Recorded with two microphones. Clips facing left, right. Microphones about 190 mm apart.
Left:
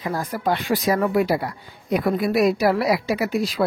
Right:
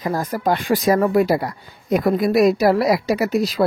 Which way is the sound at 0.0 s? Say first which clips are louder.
Right 3 dB; 40° right (ahead or behind).